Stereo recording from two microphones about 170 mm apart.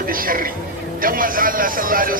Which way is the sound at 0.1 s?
55° right (ahead or behind).